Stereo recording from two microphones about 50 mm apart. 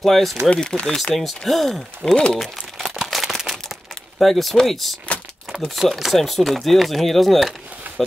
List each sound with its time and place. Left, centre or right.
0.0 s speech: centre
0.5 s speech: centre
1.4 s speech: centre
2.4 s crumpling: centre
4.2 s speech: centre